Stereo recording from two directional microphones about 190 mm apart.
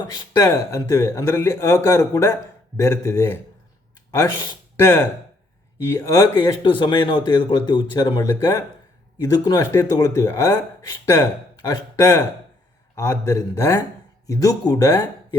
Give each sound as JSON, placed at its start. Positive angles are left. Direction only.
{"t": 0.0, "sound": "speech", "side_deg": 20}